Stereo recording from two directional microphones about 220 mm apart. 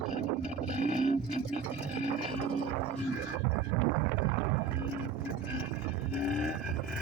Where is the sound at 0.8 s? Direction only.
35° right (ahead or behind).